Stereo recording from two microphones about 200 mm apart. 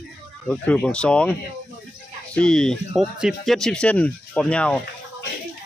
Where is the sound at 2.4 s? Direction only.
5° left (ahead or behind).